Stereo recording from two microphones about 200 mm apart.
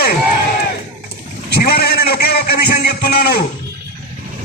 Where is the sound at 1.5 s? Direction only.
50° left (ahead or behind).